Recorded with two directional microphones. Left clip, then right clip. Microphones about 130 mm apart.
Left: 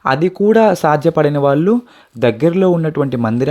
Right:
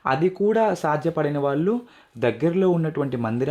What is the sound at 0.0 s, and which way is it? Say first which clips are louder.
Speech: left 7 dB; 40° left (ahead or behind).